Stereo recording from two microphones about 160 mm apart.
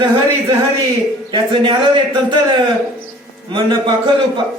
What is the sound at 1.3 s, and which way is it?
Speech, 30° right (ahead or behind).